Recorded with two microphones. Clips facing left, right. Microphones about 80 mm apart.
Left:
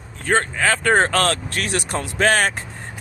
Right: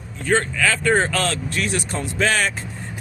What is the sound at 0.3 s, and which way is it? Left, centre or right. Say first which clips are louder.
Speech: left 1 dB; left.